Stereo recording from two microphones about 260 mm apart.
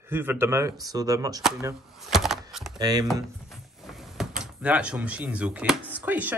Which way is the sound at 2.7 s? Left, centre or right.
Centre.